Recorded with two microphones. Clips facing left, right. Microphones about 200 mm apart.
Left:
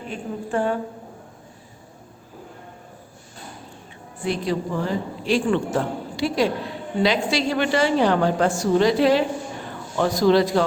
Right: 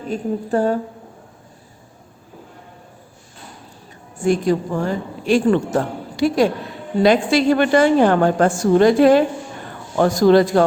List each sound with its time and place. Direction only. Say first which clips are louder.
0.1 s a woman's voice: right 6 dB; 40° right (ahead or behind)
4.2 s a man's voice: right 7 dB; 45° right (ahead or behind)